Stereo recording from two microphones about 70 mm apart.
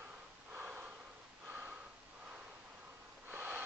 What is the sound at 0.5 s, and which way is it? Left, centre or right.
Snort, right.